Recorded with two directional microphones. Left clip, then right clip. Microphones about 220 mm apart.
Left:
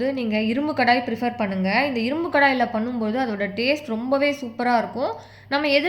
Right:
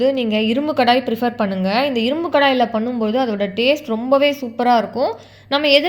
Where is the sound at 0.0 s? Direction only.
20° right (ahead or behind).